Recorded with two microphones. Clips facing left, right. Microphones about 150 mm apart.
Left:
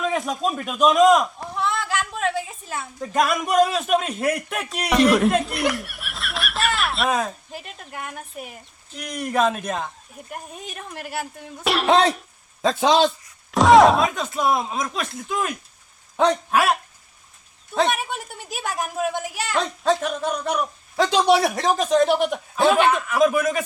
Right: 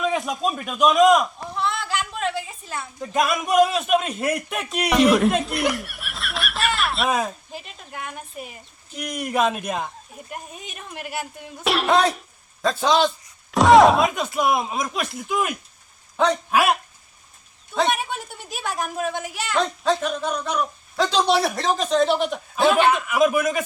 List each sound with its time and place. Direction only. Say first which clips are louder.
0.0 s speech: even; centre (ahead or behind)
4.9 s snicker: even; centre (ahead or behind)
7.5 s a man's voice: left 1 dB; centre (ahead or behind)
10.2 s speech: left 2 dB; centre (ahead or behind)
12.6 s a man's voice: left 2 dB; 20° left (ahead or behind)
13.5 s speech: even; centre (ahead or behind)
14.1 s a man's voice: even; 15° right (ahead or behind)
17.7 s speech: even; centre (ahead or behind)
22.9 s a man's voice: even; 10° right (ahead or behind)